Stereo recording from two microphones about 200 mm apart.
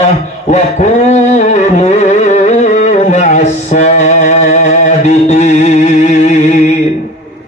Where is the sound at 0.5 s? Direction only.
35° left (ahead or behind).